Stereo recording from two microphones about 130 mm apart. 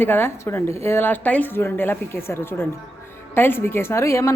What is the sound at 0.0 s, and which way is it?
A woman's voice, 15° left (ahead or behind).